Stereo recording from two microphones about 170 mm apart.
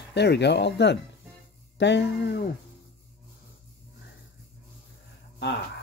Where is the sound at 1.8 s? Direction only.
90° left; by 2.4 s 75° left (ahead or behind).